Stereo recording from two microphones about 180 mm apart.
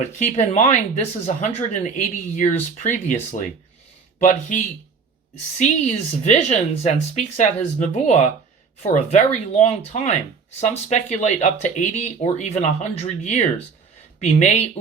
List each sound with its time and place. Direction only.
0.2 s speech: 40° left (ahead or behind)
4.2 s speech: 45° left (ahead or behind)